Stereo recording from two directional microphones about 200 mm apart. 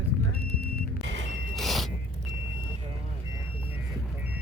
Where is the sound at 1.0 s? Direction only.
70° right (ahead or behind).